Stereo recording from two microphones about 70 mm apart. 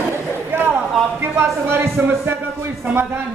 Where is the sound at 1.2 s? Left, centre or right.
Right.